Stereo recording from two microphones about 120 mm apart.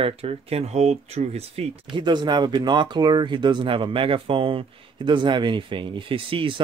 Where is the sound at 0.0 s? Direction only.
55° right (ahead or behind).